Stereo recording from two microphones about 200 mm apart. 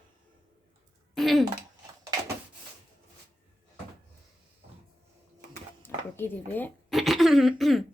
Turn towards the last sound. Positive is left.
turn(degrees=0)  # may be behind; listen again after turning